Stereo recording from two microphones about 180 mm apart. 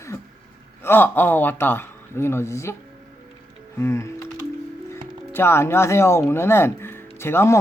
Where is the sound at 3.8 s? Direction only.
15° left (ahead or behind).